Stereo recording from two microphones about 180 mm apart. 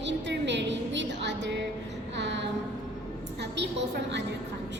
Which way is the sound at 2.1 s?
80° right.